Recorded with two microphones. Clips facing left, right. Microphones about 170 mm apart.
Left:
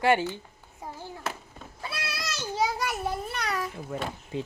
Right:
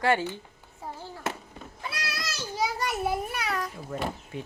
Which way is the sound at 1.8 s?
30° left (ahead or behind).